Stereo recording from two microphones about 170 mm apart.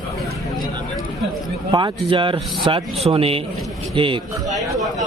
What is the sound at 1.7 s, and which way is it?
A man's voice, 25° right (ahead or behind).